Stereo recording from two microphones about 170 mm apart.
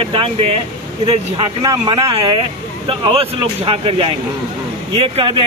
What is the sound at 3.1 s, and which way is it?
Speech, 35° right (ahead or behind).